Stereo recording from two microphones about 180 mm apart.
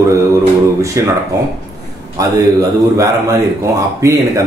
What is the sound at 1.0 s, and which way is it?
Speech, 15° right (ahead or behind).